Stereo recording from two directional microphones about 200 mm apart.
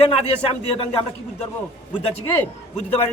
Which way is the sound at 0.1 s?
25° left (ahead or behind).